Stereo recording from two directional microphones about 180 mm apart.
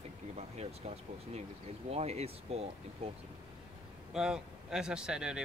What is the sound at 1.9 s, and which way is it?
Speech, 35° right (ahead or behind).